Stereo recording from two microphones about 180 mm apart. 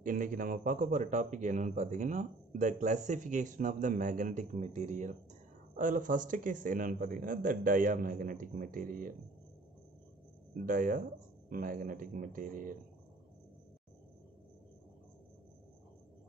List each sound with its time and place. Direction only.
0.0 s a man's voice: 50° right (ahead or behind)
10.5 s a man's voice: 45° right (ahead or behind)